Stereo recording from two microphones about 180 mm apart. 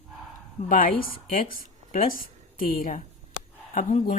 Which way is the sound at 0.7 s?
50° left (ahead or behind).